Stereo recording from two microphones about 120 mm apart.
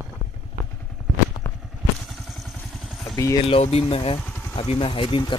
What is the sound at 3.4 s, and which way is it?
Speech, 55° left (ahead or behind).